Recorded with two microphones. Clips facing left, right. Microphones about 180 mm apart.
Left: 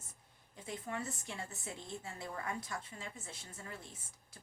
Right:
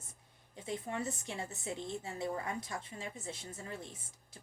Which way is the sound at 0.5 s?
20° right (ahead or behind).